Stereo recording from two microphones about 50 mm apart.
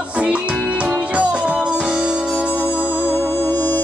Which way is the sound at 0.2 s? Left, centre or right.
Right.